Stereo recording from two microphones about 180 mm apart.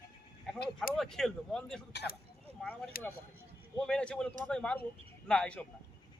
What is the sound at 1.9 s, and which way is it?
Speech, 65° left (ahead or behind).